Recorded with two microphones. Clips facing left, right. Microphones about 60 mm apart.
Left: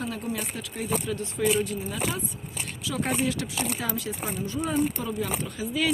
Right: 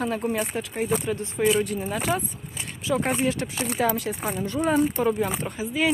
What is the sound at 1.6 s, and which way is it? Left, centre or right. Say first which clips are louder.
Speech: right 4 dB; right.